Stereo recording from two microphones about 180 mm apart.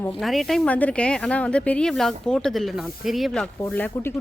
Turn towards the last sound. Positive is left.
turn(degrees=10)  # may be behind; listen again after turning